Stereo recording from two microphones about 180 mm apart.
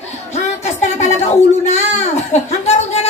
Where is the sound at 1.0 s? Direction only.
40° left (ahead or behind).